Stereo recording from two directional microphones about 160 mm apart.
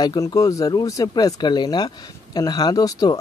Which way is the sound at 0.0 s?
25° left (ahead or behind).